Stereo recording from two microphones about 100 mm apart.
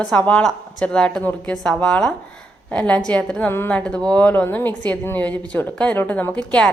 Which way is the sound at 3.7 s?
10° left (ahead or behind).